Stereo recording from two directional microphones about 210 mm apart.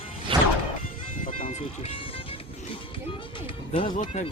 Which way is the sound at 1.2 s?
35° left (ahead or behind).